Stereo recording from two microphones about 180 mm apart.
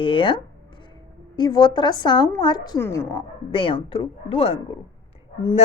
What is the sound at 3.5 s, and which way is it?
A woman's voice, 30° left (ahead or behind).